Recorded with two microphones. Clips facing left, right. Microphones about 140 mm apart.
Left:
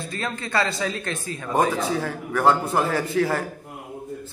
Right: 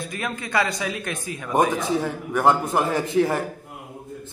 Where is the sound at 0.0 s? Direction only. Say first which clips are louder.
Even; 15° right (ahead or behind).